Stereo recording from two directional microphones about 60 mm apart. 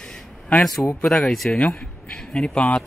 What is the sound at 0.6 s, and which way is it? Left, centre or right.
A man's voice, centre.